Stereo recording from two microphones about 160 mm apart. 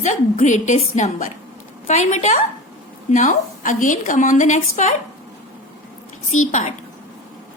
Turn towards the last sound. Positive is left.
turn(degrees=50)  # may be behind; listen again after turning